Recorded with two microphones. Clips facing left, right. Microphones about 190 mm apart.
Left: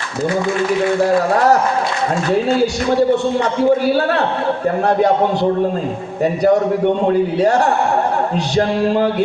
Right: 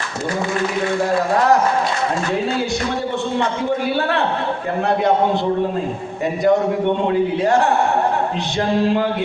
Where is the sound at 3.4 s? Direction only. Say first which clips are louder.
Left 6 dB; 40° left (ahead or behind).